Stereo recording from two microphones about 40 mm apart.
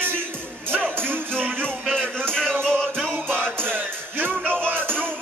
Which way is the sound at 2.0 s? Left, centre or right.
Right.